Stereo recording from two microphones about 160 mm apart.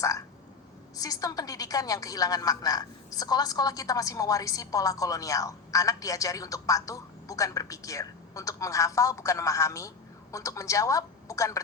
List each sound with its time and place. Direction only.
0.9 s a woman's voice: 25° left (ahead or behind)